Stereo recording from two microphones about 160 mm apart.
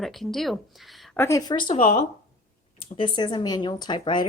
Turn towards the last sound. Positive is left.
turn(degrees=30)  # may be behind; listen again after turning